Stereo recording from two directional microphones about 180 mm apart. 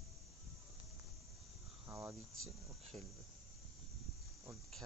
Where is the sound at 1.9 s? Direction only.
15° right (ahead or behind).